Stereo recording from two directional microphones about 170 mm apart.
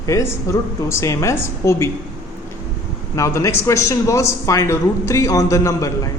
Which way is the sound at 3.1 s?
20° left (ahead or behind).